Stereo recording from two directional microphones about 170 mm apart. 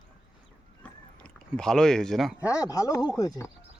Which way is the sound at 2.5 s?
20° left (ahead or behind).